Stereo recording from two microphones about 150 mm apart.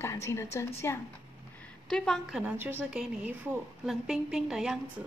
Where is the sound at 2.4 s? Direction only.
10° right (ahead or behind).